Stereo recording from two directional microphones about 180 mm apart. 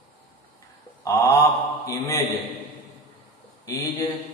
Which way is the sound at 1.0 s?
15° left (ahead or behind).